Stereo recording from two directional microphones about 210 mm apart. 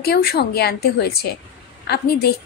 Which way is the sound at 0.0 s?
50° left (ahead or behind).